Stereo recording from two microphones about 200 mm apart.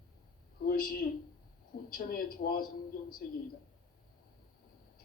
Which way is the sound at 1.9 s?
45° left (ahead or behind).